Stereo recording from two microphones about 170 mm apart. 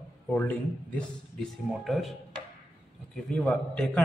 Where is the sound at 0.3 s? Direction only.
10° left (ahead or behind).